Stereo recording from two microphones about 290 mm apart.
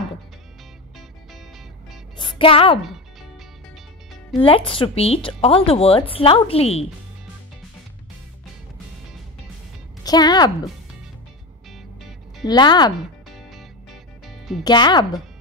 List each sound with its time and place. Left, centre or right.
2.1 s music: centre
2.9 s music: centre
4.4 s a woman's voice: centre
10.0 s a woman's voice: centre
11.7 s music: centre
12.4 s a woman's voice: centre
13.3 s music: centre
14.6 s a woman's voice: centre